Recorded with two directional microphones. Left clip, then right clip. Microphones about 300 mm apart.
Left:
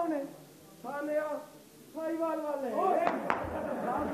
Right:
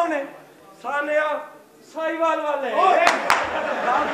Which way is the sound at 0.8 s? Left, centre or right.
Centre.